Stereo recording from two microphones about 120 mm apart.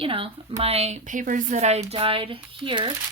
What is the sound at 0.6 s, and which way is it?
Speech, 60° right (ahead or behind).